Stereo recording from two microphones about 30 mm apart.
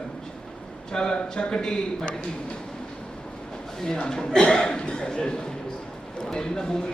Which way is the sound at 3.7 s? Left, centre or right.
Centre.